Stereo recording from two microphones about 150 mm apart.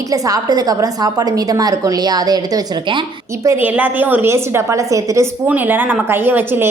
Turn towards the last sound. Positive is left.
turn(degrees=-15)  # may be behind; listen again after turning